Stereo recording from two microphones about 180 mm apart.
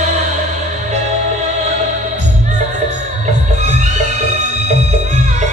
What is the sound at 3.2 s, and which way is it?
Music, 40° right (ahead or behind).